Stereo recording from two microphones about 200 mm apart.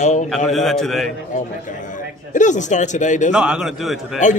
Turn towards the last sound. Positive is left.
turn(degrees=0)  # may be behind; listen again after turning